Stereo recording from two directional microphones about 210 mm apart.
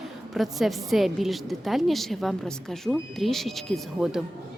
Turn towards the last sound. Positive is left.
turn(degrees=0)  # may be behind; listen again after turning